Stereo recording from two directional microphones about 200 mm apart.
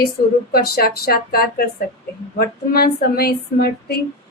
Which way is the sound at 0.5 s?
50° left (ahead or behind).